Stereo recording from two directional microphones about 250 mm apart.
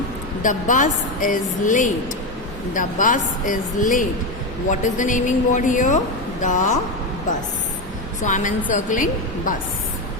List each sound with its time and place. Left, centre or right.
0.4 s a woman's voice: left
8.2 s a woman's voice: left